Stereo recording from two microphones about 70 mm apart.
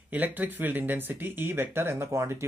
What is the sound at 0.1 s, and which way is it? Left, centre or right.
Speech, right.